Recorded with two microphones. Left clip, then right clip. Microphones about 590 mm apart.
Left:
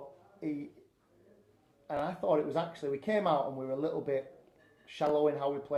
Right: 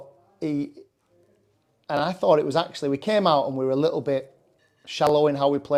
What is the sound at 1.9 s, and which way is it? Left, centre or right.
Speech, right.